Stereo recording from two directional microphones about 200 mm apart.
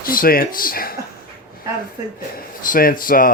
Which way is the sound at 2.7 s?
45° left (ahead or behind).